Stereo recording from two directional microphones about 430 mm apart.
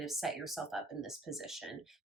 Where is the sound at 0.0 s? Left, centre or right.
Centre.